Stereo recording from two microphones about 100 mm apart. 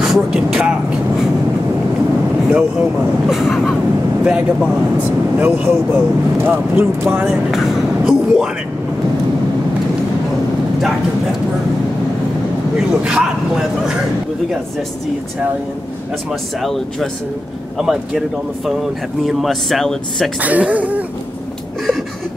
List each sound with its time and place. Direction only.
0.0 s speech: 5° right (ahead or behind)
2.5 s speech: 5° right (ahead or behind); by 7.2 s 20° right (ahead or behind)
7.2 s speech: centre (ahead or behind)
12.7 s speech: 10° right (ahead or behind)
16.3 s speech: centre (ahead or behind)
19.2 s speech: centre (ahead or behind)
20.3 s speech: 15° right (ahead or behind)